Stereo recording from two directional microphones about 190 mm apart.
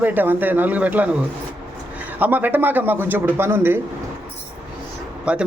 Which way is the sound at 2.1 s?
10° right (ahead or behind).